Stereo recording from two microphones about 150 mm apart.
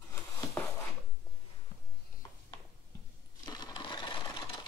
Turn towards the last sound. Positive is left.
turn(degrees=30)  # may be behind; listen again after turning